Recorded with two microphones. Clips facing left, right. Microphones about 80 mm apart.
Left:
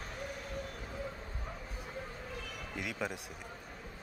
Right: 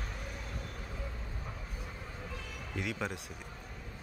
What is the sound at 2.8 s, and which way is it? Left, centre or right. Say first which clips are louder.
Speech: right 2 dB; centre.